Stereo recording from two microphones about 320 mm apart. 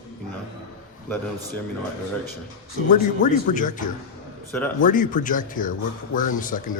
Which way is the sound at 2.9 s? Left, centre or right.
Left.